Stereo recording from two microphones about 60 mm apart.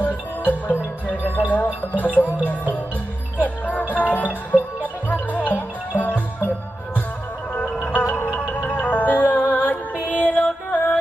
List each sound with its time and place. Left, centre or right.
0.0 s music: left
0.7 s music: right
1.5 s music: left
3.4 s music: left
7.5 s music: left
8.0 s music: left
8.3 s music: left
9.9 s music: right
10.2 s music: left